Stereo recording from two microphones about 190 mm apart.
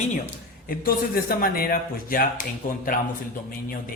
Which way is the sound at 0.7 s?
50° left (ahead or behind).